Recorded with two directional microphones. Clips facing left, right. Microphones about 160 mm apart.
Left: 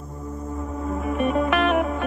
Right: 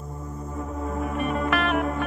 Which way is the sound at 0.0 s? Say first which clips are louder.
Left 3 dB; centre (ahead or behind).